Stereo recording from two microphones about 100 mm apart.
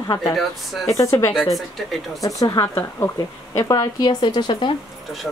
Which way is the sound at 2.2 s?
30° left (ahead or behind).